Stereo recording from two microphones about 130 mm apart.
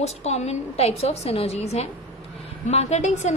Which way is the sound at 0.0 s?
55° left (ahead or behind).